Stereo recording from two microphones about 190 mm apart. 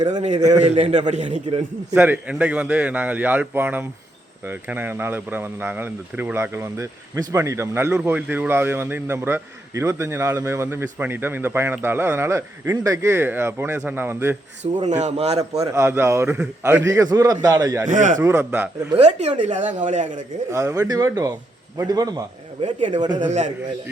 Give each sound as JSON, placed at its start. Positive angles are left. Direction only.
{"t": 0.1, "sound": "speech", "side_deg": -40}
{"t": 2.0, "sound": "speech", "side_deg": -5}
{"t": 14.8, "sound": "speech", "side_deg": -40}
{"t": 15.4, "sound": "a man's voice", "side_deg": -20}
{"t": 17.8, "sound": "a man's voice", "side_deg": -40}
{"t": 18.2, "sound": "speech", "side_deg": -10}
{"t": 18.9, "sound": "speech", "side_deg": -35}
{"t": 20.5, "sound": "a man's voice", "side_deg": -15}
{"t": 22.6, "sound": "speech", "side_deg": -40}
{"t": 23.0, "sound": "a man's voice", "side_deg": -20}
{"t": 23.2, "sound": "speech", "side_deg": -40}